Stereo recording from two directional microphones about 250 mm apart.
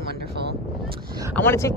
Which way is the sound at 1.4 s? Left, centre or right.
Centre.